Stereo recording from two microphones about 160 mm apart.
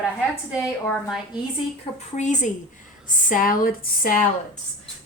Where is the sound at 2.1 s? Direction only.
50° left (ahead or behind).